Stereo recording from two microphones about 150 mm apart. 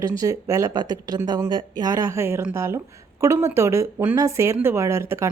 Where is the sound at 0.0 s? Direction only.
25° right (ahead or behind).